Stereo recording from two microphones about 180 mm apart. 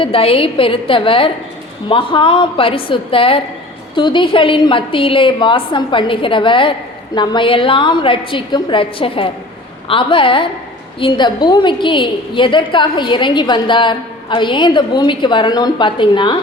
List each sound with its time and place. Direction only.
0.0 s a woman's voice: 30° left (ahead or behind)